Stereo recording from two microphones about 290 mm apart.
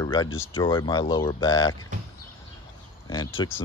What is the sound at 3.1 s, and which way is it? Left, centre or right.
Speech, centre.